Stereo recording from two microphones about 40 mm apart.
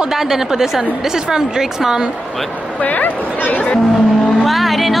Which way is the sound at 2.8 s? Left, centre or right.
Left.